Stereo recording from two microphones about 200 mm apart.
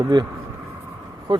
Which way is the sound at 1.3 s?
25° right (ahead or behind).